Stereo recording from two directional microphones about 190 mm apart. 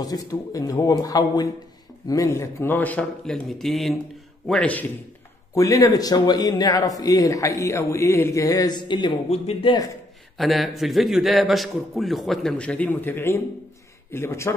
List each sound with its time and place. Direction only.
0.0 s a man's voice: 20° left (ahead or behind)
5.5 s a man's voice: 15° left (ahead or behind)
10.3 s a man's voice: centre (ahead or behind)